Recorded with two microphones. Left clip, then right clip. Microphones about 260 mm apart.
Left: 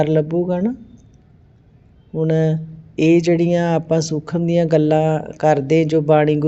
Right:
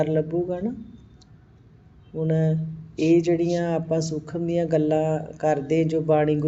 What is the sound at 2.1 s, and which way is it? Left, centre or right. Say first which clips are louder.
Speech: left 7 dB; left.